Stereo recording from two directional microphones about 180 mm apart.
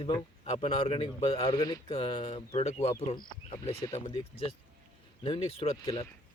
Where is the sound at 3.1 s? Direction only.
25° left (ahead or behind).